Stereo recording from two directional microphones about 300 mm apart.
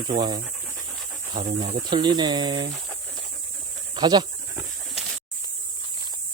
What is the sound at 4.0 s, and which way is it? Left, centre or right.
Goat, centre.